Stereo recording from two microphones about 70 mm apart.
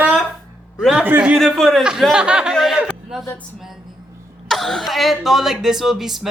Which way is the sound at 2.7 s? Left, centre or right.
Centre.